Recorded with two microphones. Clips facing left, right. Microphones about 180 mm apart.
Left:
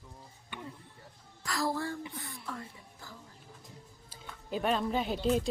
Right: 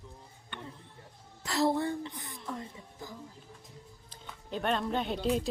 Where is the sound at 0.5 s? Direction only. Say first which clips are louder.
Left 1 dB; 10° left (ahead or behind).